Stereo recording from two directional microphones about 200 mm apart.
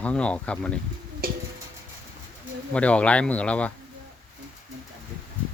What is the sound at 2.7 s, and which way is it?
Speech, 5° left (ahead or behind).